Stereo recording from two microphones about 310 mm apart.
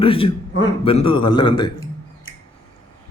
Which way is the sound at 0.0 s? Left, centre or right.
Centre.